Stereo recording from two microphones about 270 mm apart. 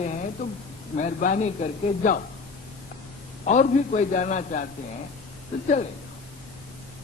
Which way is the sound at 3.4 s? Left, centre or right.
Left.